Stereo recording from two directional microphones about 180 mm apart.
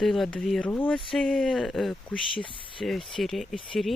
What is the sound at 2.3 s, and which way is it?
Speech, 30° left (ahead or behind).